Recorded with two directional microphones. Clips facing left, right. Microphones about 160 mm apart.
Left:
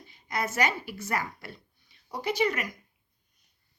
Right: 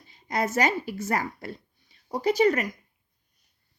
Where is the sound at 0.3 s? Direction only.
40° right (ahead or behind).